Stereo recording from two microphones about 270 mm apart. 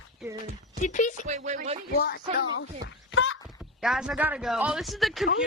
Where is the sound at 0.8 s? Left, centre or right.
Left.